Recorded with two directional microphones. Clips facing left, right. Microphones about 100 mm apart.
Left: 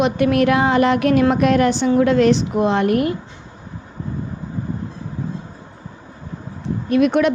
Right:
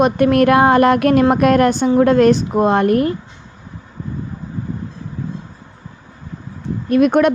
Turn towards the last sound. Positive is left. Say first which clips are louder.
# right 3 dB
turn(degrees=-45)  # may be behind; listen again after turning